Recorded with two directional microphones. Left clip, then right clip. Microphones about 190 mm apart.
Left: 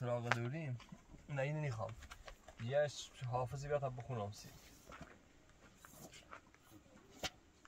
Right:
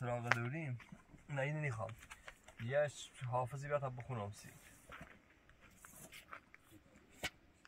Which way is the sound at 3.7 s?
20° left (ahead or behind).